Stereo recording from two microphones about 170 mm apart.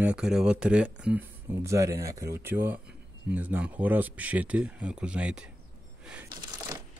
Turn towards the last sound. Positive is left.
turn(degrees=-5)  # may be behind; listen again after turning